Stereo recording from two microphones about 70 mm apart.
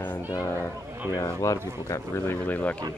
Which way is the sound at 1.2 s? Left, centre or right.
Left.